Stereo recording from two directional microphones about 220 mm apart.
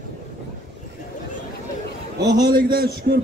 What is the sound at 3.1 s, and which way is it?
Speech, 40° right (ahead or behind).